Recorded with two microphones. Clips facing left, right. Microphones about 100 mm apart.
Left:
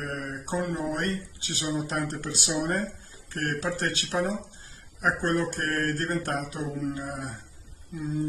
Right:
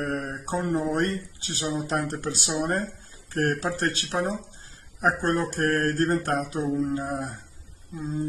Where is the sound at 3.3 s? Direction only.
35° right (ahead or behind).